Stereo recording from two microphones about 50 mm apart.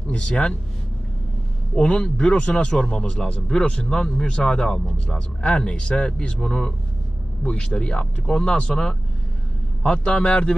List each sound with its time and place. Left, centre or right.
0.1 s a man's voice: centre
1.8 s a man's voice: centre